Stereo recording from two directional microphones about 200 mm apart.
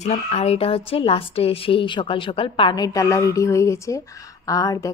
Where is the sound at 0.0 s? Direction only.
35° left (ahead or behind).